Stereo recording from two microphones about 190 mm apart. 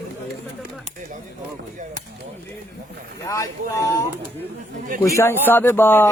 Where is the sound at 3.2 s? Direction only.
15° left (ahead or behind).